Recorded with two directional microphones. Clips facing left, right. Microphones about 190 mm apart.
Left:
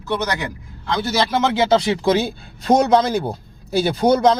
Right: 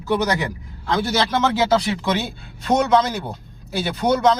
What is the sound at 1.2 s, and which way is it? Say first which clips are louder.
Speech: left 3 dB; 10° left (ahead or behind).